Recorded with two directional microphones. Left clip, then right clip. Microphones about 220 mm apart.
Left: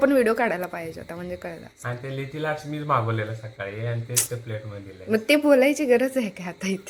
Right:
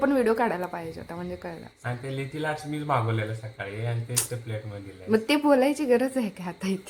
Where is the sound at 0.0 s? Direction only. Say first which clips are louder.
Left 3 dB; 5° left (ahead or behind).